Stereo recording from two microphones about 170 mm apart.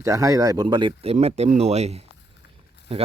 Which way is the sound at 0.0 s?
20° right (ahead or behind).